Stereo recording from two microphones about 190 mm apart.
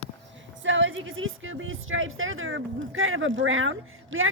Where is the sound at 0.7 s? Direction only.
85° right.